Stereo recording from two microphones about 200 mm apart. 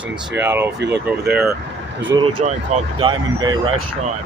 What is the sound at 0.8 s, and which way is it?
Speech, 55° right (ahead or behind).